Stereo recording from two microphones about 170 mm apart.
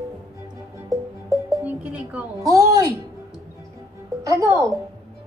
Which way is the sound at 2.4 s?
20° right (ahead or behind).